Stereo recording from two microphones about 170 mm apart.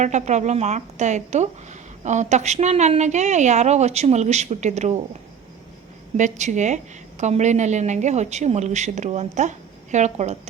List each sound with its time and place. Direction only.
0.0 s a woman's voice: 45° right (ahead or behind)
6.1 s a woman's voice: 45° right (ahead or behind)